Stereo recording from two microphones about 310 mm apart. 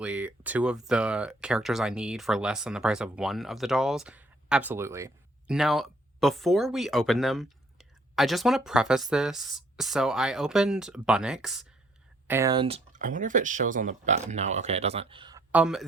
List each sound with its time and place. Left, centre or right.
0.0 s speech: centre